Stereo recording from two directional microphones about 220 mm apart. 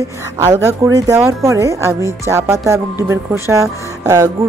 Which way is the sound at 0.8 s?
15° right (ahead or behind).